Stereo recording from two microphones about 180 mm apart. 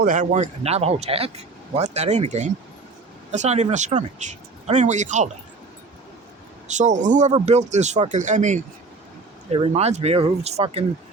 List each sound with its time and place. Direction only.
0.0 s speech: 50° right (ahead or behind)
6.7 s speech: 40° right (ahead or behind)